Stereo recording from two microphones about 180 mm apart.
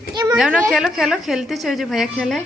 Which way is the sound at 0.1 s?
20° right (ahead or behind).